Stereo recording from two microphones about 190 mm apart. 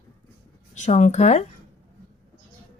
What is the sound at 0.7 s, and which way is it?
Speech, 40° left (ahead or behind).